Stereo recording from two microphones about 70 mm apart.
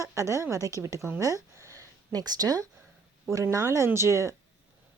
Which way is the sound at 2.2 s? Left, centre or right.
Right.